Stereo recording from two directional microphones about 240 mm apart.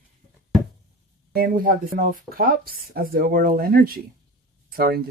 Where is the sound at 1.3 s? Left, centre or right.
Right.